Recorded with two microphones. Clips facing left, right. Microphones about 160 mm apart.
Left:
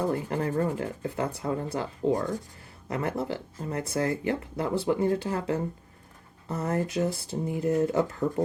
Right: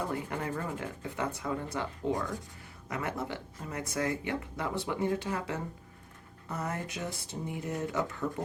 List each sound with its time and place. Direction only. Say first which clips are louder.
0.1 s speech: left 6 dB; 35° left (ahead or behind)